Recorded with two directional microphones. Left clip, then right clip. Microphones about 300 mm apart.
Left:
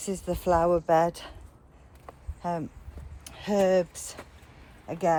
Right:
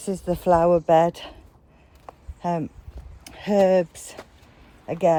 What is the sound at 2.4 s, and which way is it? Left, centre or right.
Speech, right.